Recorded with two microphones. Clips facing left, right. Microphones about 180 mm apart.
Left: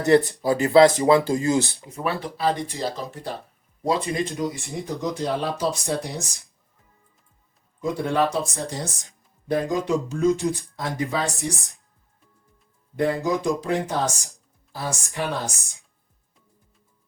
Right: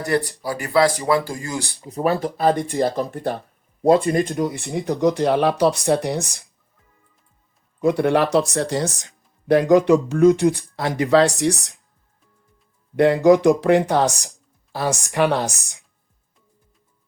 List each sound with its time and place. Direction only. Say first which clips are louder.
0.0 s speech: left 4 dB; 20° left (ahead or behind)
1.9 s speech: right 7 dB; 40° right (ahead or behind); by 6.4 s 65° right (ahead or behind)
7.8 s speech: right 5 dB; 65° right (ahead or behind)
13.0 s speech: right 9 dB; 75° right (ahead or behind)